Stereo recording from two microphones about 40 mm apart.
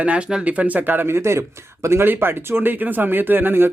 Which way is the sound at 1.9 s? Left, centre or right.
Right.